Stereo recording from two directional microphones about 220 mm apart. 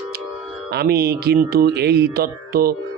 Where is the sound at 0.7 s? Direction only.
45° right (ahead or behind).